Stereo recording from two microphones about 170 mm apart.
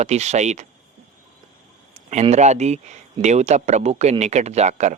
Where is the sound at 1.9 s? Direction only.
40° right (ahead or behind).